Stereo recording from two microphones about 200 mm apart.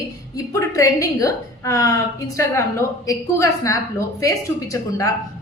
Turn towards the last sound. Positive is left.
turn(degrees=15)  # may be behind; listen again after turning